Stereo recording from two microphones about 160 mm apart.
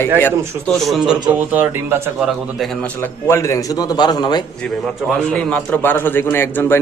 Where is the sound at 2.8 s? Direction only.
15° left (ahead or behind).